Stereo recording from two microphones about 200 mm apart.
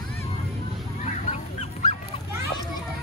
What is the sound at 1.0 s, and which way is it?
Goose, 35° left (ahead or behind).